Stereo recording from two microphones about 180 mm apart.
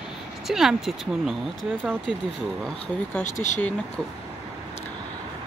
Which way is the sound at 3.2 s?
40° left (ahead or behind).